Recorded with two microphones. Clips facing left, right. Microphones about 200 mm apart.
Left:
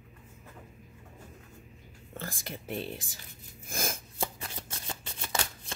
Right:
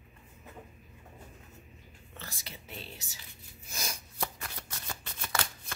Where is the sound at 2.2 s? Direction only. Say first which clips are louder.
Left 8 dB; 50° left (ahead or behind).